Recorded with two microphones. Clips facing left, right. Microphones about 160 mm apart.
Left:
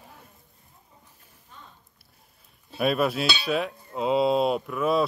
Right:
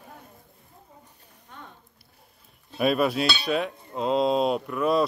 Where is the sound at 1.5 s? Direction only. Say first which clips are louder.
Right 5 dB; 65° right (ahead or behind).